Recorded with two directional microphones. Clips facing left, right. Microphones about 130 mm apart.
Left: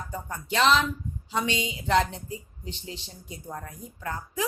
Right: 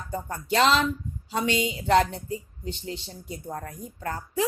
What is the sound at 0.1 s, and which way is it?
A woman's voice, 35° right (ahead or behind).